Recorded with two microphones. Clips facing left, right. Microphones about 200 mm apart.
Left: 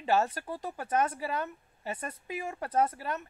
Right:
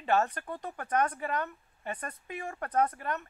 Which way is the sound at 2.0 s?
25° left (ahead or behind).